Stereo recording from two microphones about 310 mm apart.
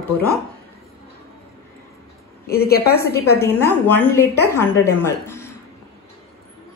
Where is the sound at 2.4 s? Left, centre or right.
Left.